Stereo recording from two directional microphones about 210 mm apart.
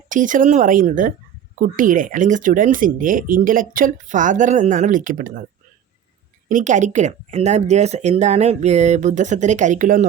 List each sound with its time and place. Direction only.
0.1 s speech: 40° right (ahead or behind)
6.5 s speech: 35° right (ahead or behind)